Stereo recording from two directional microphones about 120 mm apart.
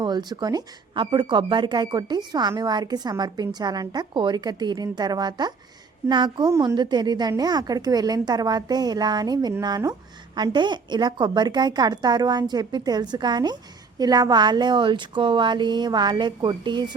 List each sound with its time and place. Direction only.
0.0 s a woman's voice: 35° right (ahead or behind)